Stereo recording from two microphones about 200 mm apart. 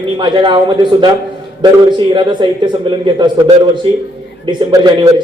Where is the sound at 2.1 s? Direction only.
25° right (ahead or behind).